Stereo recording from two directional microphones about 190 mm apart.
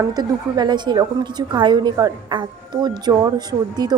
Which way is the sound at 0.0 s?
20° right (ahead or behind).